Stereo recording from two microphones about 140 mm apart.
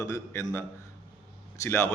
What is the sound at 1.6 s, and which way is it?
Speech, 20° left (ahead or behind).